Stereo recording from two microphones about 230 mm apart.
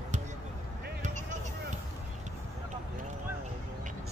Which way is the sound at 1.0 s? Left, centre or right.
Right.